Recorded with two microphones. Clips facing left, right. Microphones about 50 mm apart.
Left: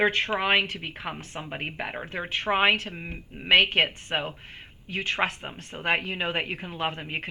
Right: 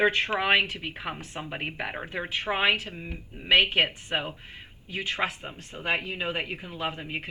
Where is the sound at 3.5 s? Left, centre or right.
Left.